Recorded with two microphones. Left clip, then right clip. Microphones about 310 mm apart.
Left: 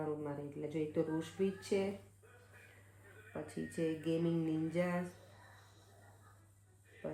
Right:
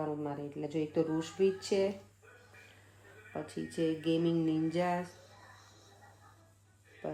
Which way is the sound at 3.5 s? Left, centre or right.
Centre.